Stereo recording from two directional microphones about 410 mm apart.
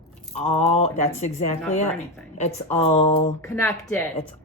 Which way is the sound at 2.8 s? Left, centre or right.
Centre.